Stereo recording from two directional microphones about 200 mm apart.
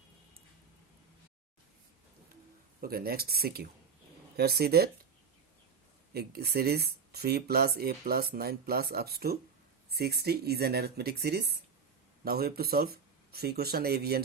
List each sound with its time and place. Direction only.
2.8 s speech: 50° right (ahead or behind)
6.1 s speech: 50° right (ahead or behind)